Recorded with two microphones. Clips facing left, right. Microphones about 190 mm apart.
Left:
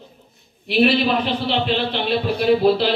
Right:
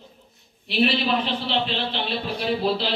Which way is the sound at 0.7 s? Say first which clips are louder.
Left 5 dB; 55° left (ahead or behind).